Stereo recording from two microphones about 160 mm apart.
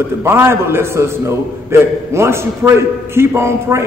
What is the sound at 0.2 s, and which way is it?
A man's voice, 15° right (ahead or behind).